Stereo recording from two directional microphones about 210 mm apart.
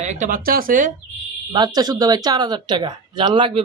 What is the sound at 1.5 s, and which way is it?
Speech, 20° right (ahead or behind).